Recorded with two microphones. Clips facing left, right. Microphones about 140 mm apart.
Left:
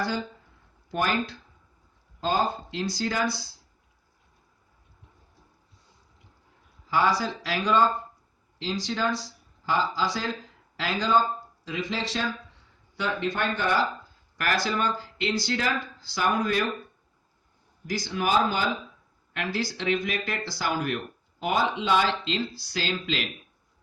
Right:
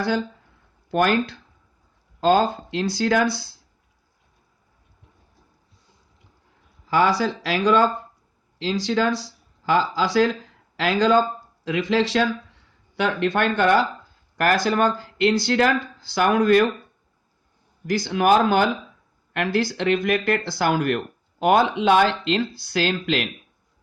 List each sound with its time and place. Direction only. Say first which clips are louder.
0.9 s speech: right 7 dB; 75° right (ahead or behind)
2.2 s speech: right 8 dB; 70° right (ahead or behind)
6.9 s speech: right 5 dB; 75° right (ahead or behind)
14.3 s speech: right 7 dB; 50° right (ahead or behind); by 16.6 s 65° right (ahead or behind)
17.8 s speech: right 9 dB; 60° right (ahead or behind)